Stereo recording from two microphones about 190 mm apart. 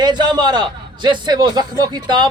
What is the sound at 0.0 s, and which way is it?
A man's voice, 25° right (ahead or behind).